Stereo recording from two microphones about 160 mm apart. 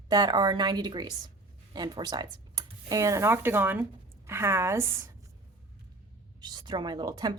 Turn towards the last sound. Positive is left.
turn(degrees=-25)  # may be behind; listen again after turning